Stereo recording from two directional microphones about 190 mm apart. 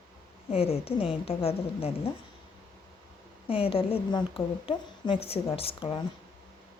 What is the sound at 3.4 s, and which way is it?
A woman's voice, 30° left (ahead or behind).